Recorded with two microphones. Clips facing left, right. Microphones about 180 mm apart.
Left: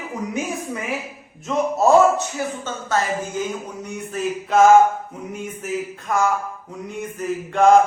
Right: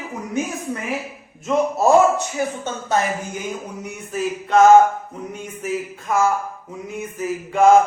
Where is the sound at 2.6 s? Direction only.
15° right (ahead or behind).